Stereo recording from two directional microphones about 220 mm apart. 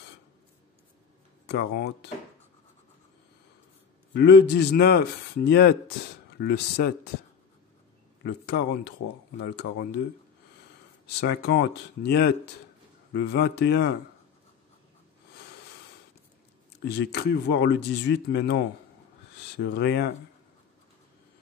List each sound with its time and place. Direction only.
1.5 s speech: 45° left (ahead or behind)
4.1 s speech: 50° left (ahead or behind)
8.2 s speech: 50° left (ahead or behind)
11.1 s speech: 50° left (ahead or behind)
16.8 s speech: 50° left (ahead or behind)